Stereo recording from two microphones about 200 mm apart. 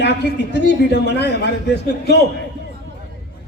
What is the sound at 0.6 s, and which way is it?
A man's voice, 55° left (ahead or behind).